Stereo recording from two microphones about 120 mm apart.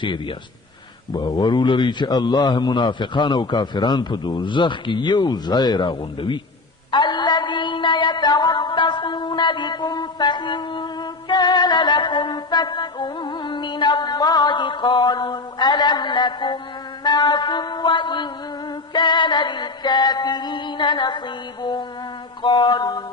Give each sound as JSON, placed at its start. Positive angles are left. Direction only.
{"t": 0.0, "sound": "a man's voice", "side_deg": 45}
{"t": 6.9, "sound": "music", "side_deg": 40}
{"t": 17.0, "sound": "a man's voice", "side_deg": 35}